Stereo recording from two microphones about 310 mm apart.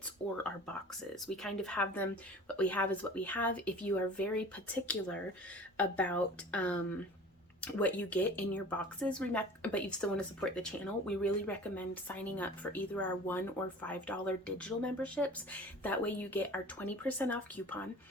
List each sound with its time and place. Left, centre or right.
1.4 s speech: centre